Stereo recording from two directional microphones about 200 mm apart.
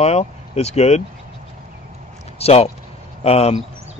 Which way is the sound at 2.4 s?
30° left (ahead or behind).